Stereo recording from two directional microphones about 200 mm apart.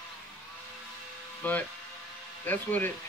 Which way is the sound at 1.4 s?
10° left (ahead or behind).